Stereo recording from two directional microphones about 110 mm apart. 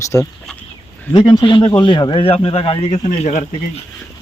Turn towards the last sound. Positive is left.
turn(degrees=80)